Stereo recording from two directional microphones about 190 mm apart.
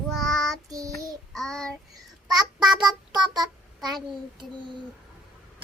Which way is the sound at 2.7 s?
20° right (ahead or behind).